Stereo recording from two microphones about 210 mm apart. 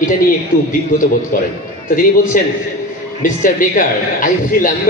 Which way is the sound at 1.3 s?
40° left (ahead or behind).